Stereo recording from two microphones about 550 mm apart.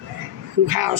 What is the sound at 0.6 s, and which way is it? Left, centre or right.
Speech, right.